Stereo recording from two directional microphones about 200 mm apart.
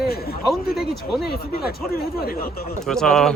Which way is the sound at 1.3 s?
50° left (ahead or behind).